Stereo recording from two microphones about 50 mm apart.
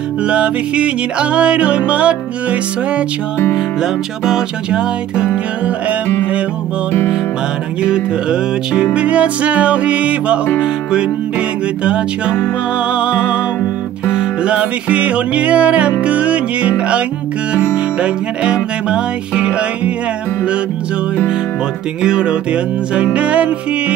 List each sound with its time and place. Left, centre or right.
0.2 s music: right
3.5 s music: centre
7.8 s music: centre
22.0 s music: centre